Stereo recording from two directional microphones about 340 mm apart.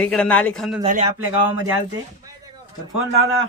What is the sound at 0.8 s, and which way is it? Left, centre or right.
Speech, centre.